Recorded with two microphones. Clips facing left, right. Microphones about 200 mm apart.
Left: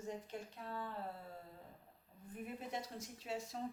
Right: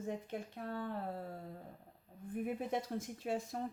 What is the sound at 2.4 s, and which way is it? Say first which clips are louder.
A woman's voice: right 7 dB; 55° right (ahead or behind).